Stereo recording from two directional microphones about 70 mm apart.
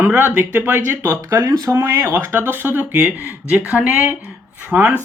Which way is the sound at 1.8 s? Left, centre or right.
Right.